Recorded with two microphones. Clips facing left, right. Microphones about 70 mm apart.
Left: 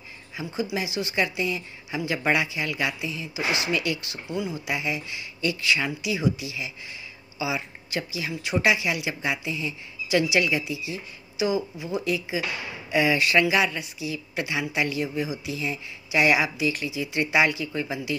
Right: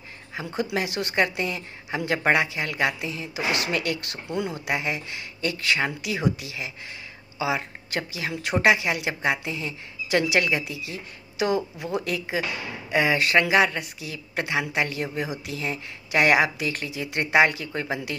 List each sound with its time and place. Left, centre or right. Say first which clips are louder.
0.3 s a woman's voice: right 1 dB; right